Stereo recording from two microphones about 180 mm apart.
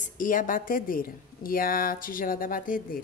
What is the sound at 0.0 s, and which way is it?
A woman's voice, 50° left (ahead or behind).